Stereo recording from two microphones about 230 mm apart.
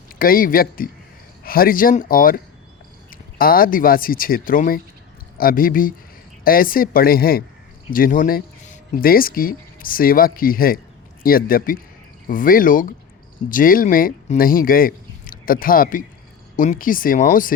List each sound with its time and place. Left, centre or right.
0.2 s speech: left